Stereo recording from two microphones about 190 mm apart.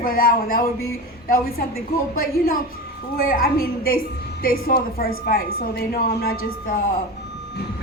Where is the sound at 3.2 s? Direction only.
50° left (ahead or behind).